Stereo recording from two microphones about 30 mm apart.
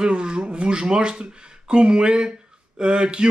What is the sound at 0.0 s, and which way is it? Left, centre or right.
Speech, right.